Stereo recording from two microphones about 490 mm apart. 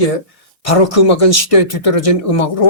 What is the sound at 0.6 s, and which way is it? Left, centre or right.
Speech, left.